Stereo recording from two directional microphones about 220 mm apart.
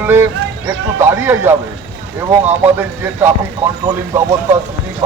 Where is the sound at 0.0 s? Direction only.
10° right (ahead or behind).